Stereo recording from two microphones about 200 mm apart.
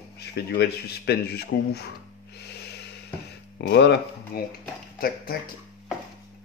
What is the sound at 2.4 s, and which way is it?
Snort, 55° left (ahead or behind).